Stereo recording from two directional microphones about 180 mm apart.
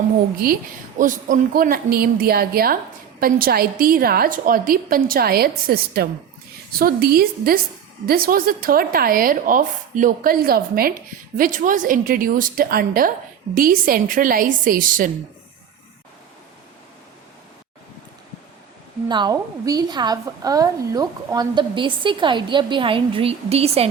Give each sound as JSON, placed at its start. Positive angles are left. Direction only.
{"t": 0.9, "sound": "a woman's voice", "side_deg": -45}
{"t": 19.0, "sound": "a woman's voice", "side_deg": -25}